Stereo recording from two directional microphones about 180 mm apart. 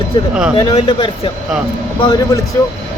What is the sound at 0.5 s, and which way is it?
Speech, 25° left (ahead or behind).